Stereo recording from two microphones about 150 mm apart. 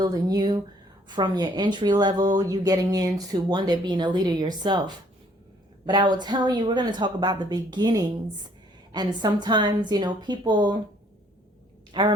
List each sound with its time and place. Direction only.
0.0 s speech: 25° right (ahead or behind)
5.8 s speech: 30° right (ahead or behind)
11.9 s a woman's voice: 30° right (ahead or behind)